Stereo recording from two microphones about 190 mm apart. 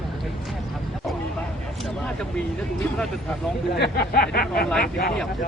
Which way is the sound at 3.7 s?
55° left (ahead or behind).